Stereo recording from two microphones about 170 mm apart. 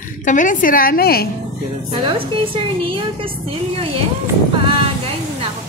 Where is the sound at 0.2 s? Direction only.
50° left (ahead or behind).